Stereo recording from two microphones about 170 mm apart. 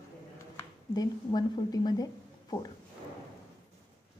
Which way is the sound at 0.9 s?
25° left (ahead or behind).